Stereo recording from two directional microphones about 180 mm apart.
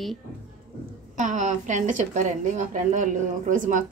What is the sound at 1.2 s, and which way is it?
A woman's voice, 40° right (ahead or behind).